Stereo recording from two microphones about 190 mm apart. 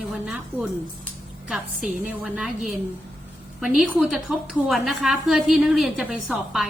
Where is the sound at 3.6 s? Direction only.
5° right (ahead or behind).